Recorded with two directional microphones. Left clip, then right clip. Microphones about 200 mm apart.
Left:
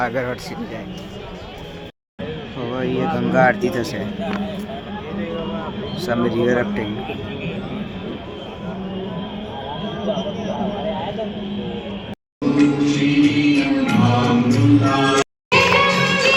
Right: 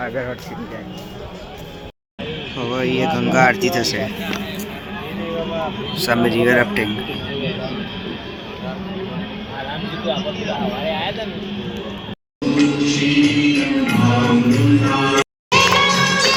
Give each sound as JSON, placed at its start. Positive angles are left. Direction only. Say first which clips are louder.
{"t": 0.0, "sound": "speech", "louder": "left 3 dB", "side_deg": 20}
{"t": 2.6, "sound": "speech", "louder": "right 3 dB", "side_deg": 0}
{"t": 3.6, "sound": "speech", "louder": "right 3 dB", "side_deg": 50}
{"t": 6.1, "sound": "speech", "louder": "right 3 dB", "side_deg": 5}
{"t": 10.2, "sound": "speech", "louder": "right 1 dB", "side_deg": 50}
{"t": 12.4, "sound": "music", "louder": "even", "side_deg": 30}
{"t": 15.4, "sound": "music", "louder": "right 1 dB", "side_deg": 0}